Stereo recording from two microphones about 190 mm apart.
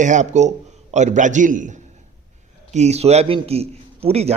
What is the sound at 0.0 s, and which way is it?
A man's voice, 40° right (ahead or behind).